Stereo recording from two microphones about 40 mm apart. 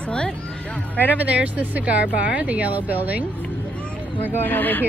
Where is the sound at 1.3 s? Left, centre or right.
Right.